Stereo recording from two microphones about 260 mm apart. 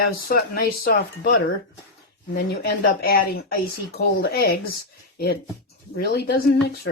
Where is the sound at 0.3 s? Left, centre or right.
Left.